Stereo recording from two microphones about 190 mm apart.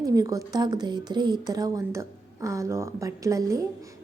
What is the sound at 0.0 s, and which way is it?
A woman's voice, 20° right (ahead or behind).